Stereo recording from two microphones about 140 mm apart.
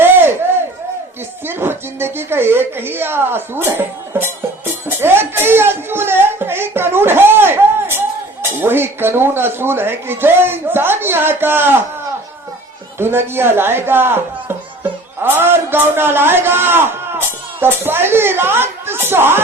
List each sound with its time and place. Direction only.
0.0 s a sound: 15° right (ahead or behind)
1.5 s a man's voice: 15° right (ahead or behind)
13.0 s a man's voice: 15° right (ahead or behind)